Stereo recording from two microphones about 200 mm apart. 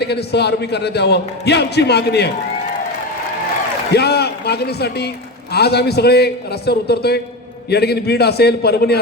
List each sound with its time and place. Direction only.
0.0 s a man's voice: 55° left (ahead or behind)
3.9 s a man's voice: 55° left (ahead or behind)